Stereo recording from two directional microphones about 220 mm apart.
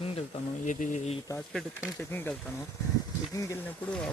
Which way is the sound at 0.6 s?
35° left (ahead or behind).